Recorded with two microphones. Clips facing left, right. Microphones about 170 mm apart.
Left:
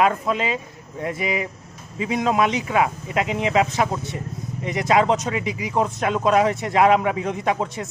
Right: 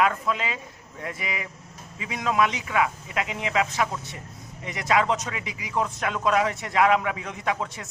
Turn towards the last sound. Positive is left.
turn(degrees=25)  # may be behind; listen again after turning